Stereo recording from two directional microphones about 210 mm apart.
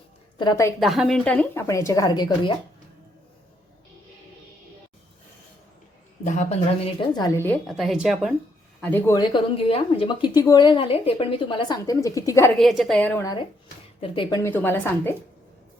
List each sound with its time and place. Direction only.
0.3 s a woman's voice: 15° left (ahead or behind)
0.8 s a woman's voice: centre (ahead or behind); by 2.6 s 20° left (ahead or behind)
6.2 s speech: 35° left (ahead or behind); by 7.5 s 15° left (ahead or behind)
7.7 s a woman's voice: centre (ahead or behind)
8.8 s speech: 10° left (ahead or behind)
12.5 s a woman's voice: centre (ahead or behind)
14.0 s a woman's voice: 20° left (ahead or behind)